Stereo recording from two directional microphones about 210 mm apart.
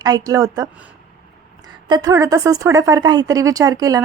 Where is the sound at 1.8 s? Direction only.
20° right (ahead or behind).